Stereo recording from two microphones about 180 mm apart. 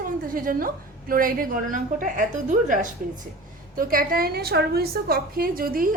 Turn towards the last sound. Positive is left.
turn(degrees=-50)  # may be behind; listen again after turning